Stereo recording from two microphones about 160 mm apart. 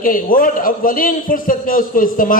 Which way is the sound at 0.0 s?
60° left (ahead or behind).